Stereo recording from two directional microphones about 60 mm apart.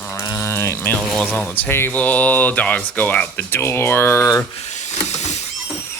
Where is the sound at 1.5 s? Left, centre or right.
Left.